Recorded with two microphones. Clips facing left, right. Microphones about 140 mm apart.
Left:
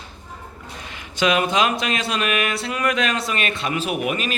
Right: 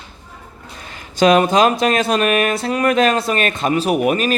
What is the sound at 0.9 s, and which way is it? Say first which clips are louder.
Speech: right 7 dB; 40° right (ahead or behind).